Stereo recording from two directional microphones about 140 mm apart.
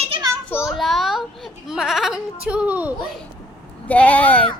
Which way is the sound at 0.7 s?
Centre (ahead or behind).